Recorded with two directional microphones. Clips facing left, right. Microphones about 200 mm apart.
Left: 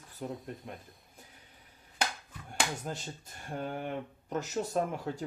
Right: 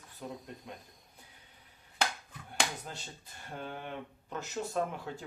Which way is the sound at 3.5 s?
45° left (ahead or behind).